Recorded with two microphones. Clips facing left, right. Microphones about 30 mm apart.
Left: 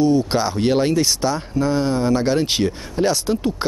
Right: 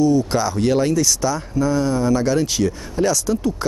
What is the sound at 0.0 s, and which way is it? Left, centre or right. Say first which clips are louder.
Speech: even; left.